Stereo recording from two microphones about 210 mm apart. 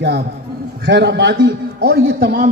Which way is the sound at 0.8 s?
55° right (ahead or behind).